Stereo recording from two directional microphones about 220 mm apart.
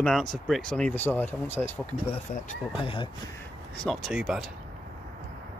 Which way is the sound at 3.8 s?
Centre (ahead or behind).